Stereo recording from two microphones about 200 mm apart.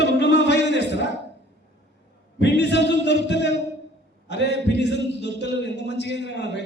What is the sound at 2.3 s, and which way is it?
Music, 60° left (ahead or behind).